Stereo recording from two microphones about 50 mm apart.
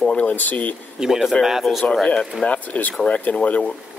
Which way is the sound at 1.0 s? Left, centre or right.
Centre.